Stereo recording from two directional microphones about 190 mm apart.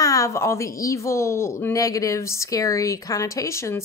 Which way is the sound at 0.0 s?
15° left (ahead or behind).